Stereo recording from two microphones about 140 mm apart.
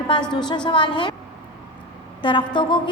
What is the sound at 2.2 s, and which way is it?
Speech, 35° left (ahead or behind).